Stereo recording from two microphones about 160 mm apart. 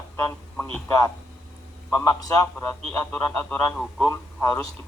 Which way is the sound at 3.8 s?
Centre (ahead or behind).